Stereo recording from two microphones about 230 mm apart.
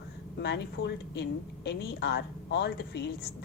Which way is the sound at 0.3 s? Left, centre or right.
Left.